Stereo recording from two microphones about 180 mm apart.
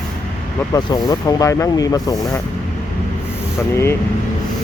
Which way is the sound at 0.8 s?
20° left (ahead or behind).